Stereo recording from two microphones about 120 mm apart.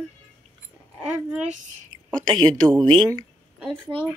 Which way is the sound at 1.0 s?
10° right (ahead or behind).